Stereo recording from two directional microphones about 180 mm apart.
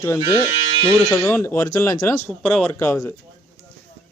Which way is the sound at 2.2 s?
5° left (ahead or behind).